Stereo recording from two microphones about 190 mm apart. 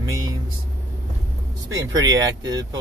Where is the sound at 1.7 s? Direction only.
20° right (ahead or behind).